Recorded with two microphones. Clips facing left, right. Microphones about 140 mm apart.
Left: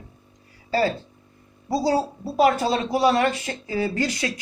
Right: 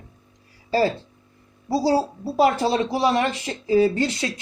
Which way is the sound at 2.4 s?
25° right (ahead or behind).